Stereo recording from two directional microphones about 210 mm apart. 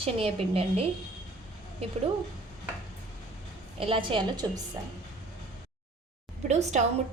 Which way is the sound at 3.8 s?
25° right (ahead or behind).